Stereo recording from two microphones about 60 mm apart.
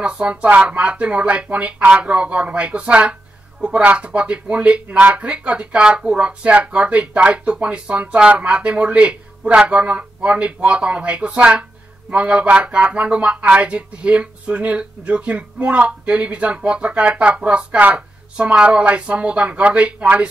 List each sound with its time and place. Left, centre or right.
0.0 s speech: centre